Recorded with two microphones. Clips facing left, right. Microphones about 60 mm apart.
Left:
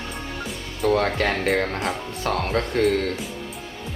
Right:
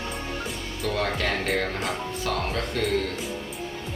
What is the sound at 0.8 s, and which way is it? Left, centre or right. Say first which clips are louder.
Speech: left 6 dB; left.